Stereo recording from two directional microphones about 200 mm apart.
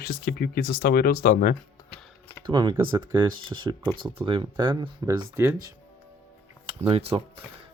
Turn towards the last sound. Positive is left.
turn(degrees=-30)  # may be behind; listen again after turning